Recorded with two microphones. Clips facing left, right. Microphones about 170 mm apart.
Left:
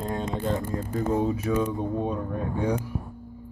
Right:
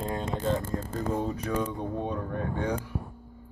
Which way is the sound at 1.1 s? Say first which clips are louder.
Left 5 dB; 5° left (ahead or behind).